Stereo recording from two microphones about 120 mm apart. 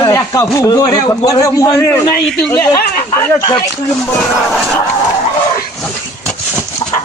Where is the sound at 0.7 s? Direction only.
35° left (ahead or behind).